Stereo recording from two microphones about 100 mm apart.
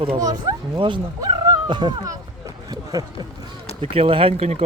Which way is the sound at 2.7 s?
40° right (ahead or behind).